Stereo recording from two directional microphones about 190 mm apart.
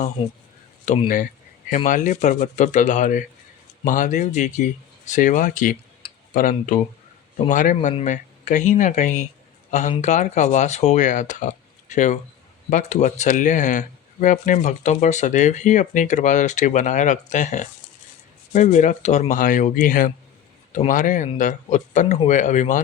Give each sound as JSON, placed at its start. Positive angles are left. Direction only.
{"t": 0.2, "sound": "speech", "side_deg": 30}
{"t": 1.0, "sound": "speech", "side_deg": 45}